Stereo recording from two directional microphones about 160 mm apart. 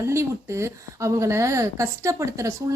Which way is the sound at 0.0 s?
15° right (ahead or behind).